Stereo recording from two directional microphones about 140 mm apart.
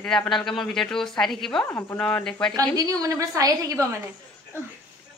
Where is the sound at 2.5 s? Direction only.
25° right (ahead or behind).